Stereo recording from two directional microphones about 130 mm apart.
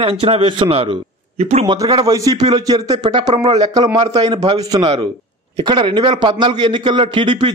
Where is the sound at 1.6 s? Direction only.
30° right (ahead or behind).